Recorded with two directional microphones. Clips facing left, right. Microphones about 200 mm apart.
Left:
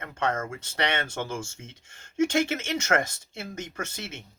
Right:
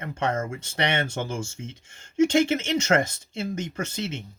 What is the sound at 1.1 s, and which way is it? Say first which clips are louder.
Speech: right 2 dB; 15° right (ahead or behind).